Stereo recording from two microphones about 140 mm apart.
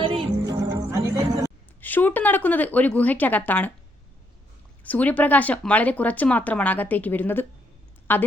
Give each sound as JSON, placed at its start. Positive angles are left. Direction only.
{"t": 0.0, "sound": "music", "side_deg": -40}
{"t": 0.3, "sound": "music", "side_deg": -25}
{"t": 1.8, "sound": "speech", "side_deg": 15}
{"t": 4.8, "sound": "speech", "side_deg": 10}